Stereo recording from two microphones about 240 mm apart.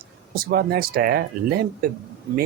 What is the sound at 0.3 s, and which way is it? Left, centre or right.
Speech, right.